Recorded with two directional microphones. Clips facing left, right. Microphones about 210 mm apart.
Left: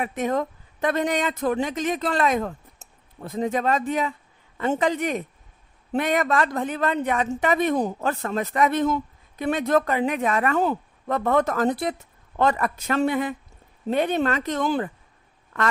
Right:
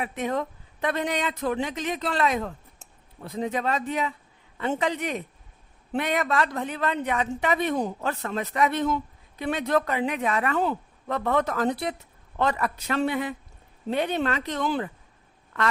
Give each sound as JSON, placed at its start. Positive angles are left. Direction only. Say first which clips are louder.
{"t": 0.0, "sound": "speech", "louder": "left 3 dB", "side_deg": 45}